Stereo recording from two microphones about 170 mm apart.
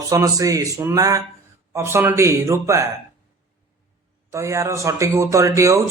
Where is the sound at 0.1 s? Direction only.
20° right (ahead or behind).